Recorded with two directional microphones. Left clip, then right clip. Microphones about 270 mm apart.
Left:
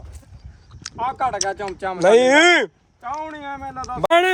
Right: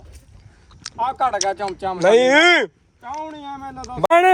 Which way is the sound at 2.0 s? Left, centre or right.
Centre.